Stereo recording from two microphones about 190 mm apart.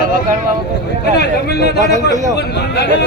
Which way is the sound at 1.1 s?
55° left (ahead or behind).